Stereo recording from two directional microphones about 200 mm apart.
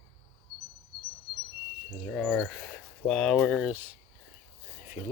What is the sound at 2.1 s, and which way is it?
Speech, 5° left (ahead or behind).